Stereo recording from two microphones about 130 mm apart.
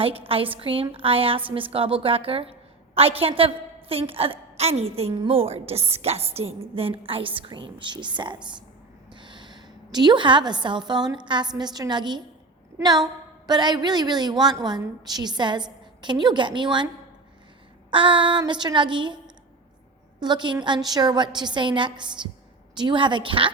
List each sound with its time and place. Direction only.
0.3 s a woman's voice: 45° right (ahead or behind)
5.1 s a woman's voice: 40° right (ahead or behind)
17.9 s a woman's voice: 40° right (ahead or behind)